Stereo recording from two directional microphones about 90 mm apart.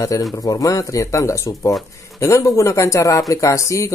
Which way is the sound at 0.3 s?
45° left (ahead or behind).